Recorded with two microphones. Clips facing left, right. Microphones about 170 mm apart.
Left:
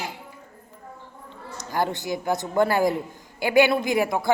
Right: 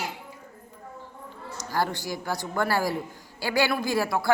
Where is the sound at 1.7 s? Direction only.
20° left (ahead or behind).